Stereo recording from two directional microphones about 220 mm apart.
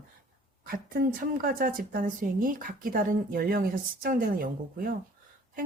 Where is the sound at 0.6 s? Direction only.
40° right (ahead or behind).